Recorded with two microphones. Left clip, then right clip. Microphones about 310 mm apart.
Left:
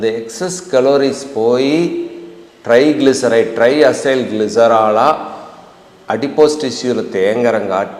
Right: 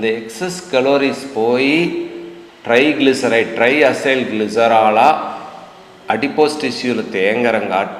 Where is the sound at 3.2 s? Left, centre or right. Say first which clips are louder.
Left 3 dB; left.